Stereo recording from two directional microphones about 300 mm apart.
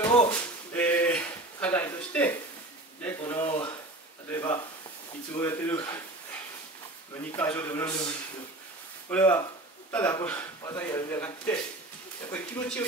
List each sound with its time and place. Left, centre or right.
0.0 s a sound: centre
3.0 s speech: centre
7.3 s speech: centre
9.1 s speech: centre